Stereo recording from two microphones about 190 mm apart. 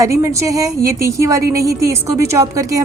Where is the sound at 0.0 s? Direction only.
15° right (ahead or behind).